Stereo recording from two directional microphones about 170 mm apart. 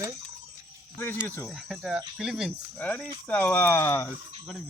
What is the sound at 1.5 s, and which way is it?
Speech, centre (ahead or behind).